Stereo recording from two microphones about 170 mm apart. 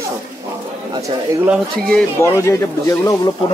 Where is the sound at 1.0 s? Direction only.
10° right (ahead or behind).